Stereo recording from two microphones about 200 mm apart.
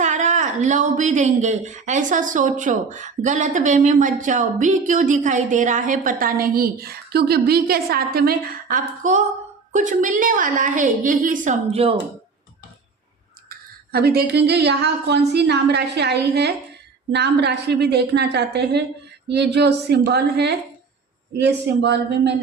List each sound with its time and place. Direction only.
0.0 s speech: 35° right (ahead or behind)
13.5 s speech: 50° right (ahead or behind)